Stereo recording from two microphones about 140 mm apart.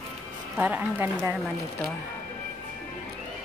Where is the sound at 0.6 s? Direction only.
10° right (ahead or behind).